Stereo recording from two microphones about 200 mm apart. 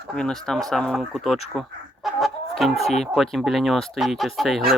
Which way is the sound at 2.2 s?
Centre (ahead or behind).